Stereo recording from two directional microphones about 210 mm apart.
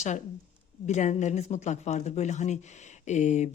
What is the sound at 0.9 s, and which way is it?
Speech, 35° left (ahead or behind).